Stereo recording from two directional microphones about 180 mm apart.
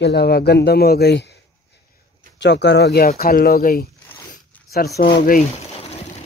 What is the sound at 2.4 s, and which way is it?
Speech, 75° left (ahead or behind).